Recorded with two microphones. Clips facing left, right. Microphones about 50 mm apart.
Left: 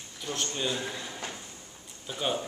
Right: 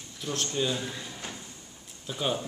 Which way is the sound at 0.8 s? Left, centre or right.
Centre.